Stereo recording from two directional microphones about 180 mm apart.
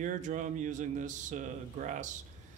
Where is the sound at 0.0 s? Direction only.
45° right (ahead or behind).